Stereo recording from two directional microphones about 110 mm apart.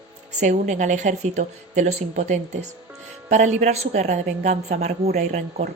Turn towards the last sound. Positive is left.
turn(degrees=-90)